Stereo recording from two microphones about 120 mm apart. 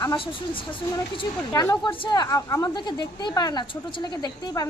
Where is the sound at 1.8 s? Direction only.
40° left (ahead or behind).